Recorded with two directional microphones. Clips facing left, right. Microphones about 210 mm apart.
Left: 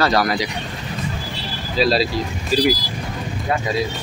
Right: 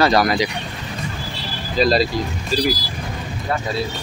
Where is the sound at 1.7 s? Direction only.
5° left (ahead or behind).